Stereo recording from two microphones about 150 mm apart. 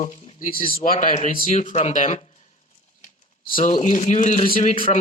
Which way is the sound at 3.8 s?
50° left (ahead or behind).